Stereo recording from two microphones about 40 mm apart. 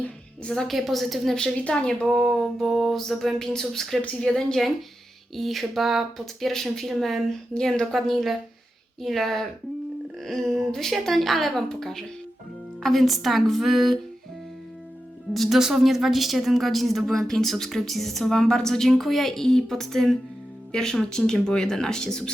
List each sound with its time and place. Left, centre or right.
0.4 s speech: centre
0.7 s a woman's voice: centre
1.6 s speech: left
2.0 s a woman's voice: centre
3.3 s speech: centre
5.3 s a woman's voice: centre
6.5 s speech: centre
7.5 s speech: centre
7.9 s a woman's voice: centre
15.3 s a woman's voice: centre